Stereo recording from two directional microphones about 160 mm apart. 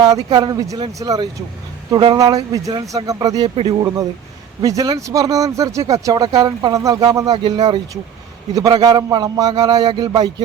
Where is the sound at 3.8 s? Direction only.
25° right (ahead or behind).